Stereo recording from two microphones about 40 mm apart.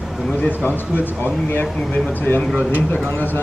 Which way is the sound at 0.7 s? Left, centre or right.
Left.